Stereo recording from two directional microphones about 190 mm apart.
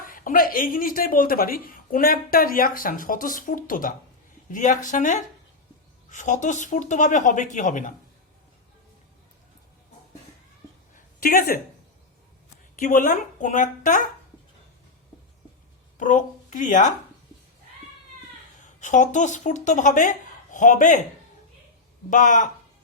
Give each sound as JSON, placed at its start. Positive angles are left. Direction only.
{"t": 0.0, "sound": "speech", "side_deg": 45}
{"t": 10.9, "sound": "a sound", "side_deg": 50}
{"t": 12.7, "sound": "speech", "side_deg": 45}
{"t": 16.0, "sound": "a woman's voice", "side_deg": 45}
{"t": 18.8, "sound": "speech", "side_deg": 40}
{"t": 22.1, "sound": "speech", "side_deg": 40}